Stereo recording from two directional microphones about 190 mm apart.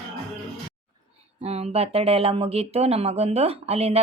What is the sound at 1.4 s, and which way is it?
Speech, 30° right (ahead or behind).